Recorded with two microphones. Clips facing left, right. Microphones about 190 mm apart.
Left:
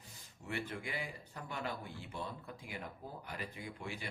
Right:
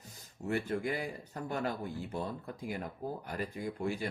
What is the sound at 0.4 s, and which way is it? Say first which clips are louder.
Speech: right 9 dB; 45° right (ahead or behind).